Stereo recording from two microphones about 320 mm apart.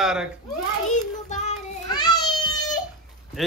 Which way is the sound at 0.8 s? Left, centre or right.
Left.